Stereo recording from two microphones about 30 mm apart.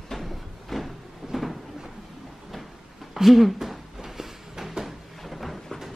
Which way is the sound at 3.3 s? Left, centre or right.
Centre.